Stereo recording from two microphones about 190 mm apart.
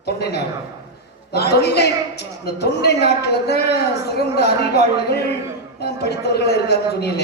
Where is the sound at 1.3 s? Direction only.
60° left (ahead or behind).